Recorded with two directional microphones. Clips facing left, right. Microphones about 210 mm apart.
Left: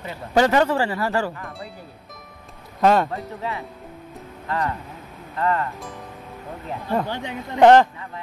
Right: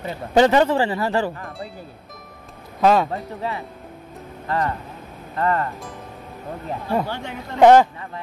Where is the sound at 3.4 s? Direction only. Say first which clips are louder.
Right 2 dB; 30° right (ahead or behind).